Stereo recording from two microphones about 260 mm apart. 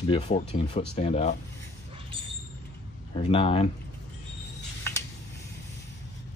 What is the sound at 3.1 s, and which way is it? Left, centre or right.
Speech, left.